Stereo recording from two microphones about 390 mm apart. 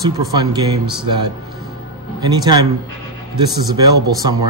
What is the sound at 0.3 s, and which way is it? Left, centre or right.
Speech, centre.